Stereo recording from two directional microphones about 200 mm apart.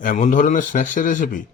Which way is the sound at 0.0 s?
40° left (ahead or behind).